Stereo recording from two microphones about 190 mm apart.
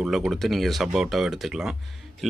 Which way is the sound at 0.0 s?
5° right (ahead or behind).